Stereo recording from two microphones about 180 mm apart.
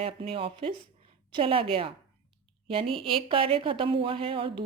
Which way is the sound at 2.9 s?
30° right (ahead or behind).